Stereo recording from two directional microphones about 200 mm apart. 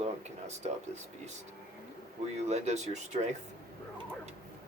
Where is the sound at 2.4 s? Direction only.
35° right (ahead or behind).